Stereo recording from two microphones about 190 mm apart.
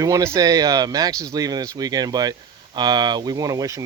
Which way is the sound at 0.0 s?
15° right (ahead or behind).